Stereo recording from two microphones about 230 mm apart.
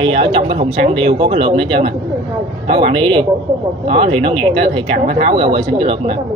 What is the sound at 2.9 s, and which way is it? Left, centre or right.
Speech, right.